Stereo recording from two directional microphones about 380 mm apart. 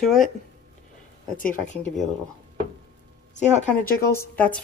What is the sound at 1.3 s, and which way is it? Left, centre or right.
Speech, left.